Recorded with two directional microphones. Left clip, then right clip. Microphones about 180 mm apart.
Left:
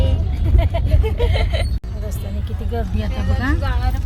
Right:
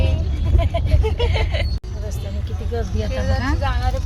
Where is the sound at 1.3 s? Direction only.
25° left (ahead or behind).